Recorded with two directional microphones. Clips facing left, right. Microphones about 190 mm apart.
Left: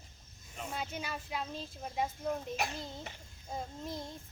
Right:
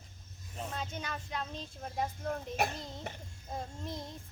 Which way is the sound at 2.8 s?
Centre (ahead or behind).